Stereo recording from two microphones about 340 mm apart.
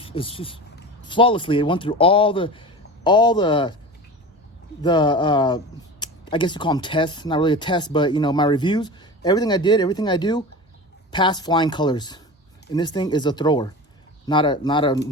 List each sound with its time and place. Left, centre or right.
0.0 s speech: centre
4.8 s speech: centre